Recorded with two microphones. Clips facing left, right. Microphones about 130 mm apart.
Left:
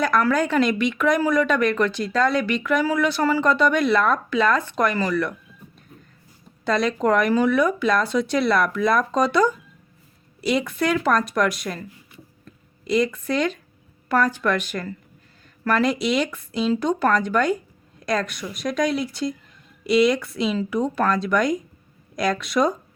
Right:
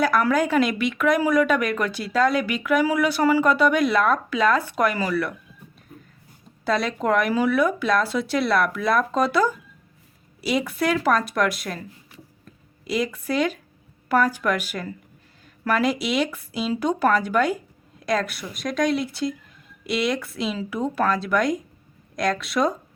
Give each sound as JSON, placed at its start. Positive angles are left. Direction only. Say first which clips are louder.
{"t": 0.0, "sound": "a woman's voice", "louder": "even", "side_deg": -10}
{"t": 6.7, "sound": "speech", "louder": "left 2 dB", "side_deg": -5}
{"t": 12.9, "sound": "a woman's voice", "louder": "left 3 dB", "side_deg": -5}